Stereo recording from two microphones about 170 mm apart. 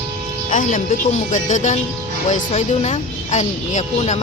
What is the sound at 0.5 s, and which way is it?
Speech, 45° left (ahead or behind).